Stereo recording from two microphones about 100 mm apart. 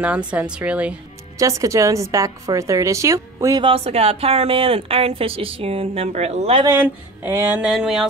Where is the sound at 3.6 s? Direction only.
80° right.